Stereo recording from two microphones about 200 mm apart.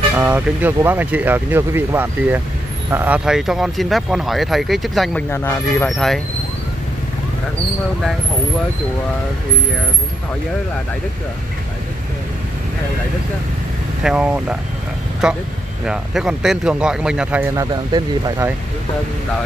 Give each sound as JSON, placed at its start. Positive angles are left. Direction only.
{"t": 0.1, "sound": "speech", "side_deg": -10}
{"t": 5.3, "sound": "speech", "side_deg": 10}
{"t": 14.0, "sound": "speech", "side_deg": -5}
{"t": 17.6, "sound": "speech", "side_deg": -20}